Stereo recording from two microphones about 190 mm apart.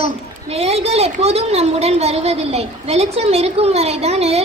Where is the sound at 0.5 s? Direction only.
30° right (ahead or behind).